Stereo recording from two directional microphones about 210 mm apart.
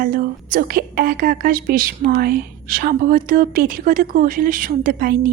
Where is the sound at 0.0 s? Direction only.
40° right (ahead or behind).